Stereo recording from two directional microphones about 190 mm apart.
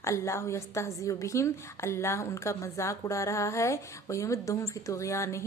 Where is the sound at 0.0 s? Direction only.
15° left (ahead or behind).